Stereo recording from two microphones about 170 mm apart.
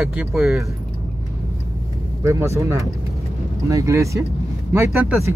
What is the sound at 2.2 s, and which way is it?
Speech, 15° right (ahead or behind).